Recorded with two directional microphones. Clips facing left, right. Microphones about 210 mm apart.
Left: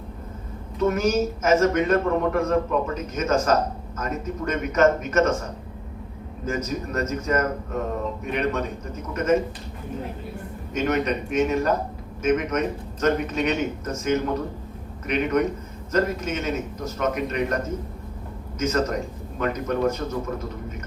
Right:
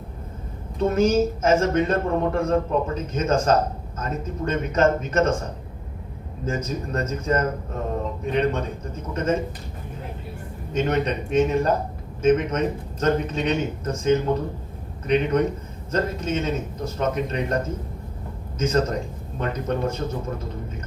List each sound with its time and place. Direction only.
0.9 s a man's voice: 30° right (ahead or behind)
6.4 s a man's voice: 30° right (ahead or behind)
10.8 s a man's voice: 30° right (ahead or behind)
18.6 s a man's voice: 30° right (ahead or behind)